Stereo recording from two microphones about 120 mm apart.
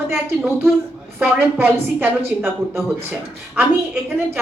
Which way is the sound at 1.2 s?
15° right (ahead or behind).